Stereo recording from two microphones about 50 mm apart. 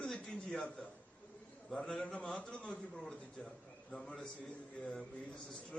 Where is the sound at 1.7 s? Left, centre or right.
Centre.